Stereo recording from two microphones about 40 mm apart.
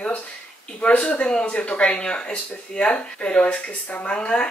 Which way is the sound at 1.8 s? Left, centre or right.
Left.